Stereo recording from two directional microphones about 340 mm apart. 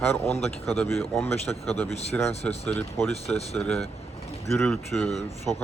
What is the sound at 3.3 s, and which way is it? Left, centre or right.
Speech, centre.